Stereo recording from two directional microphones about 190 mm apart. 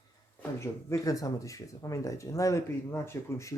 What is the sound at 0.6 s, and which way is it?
A man's voice, 15° left (ahead or behind).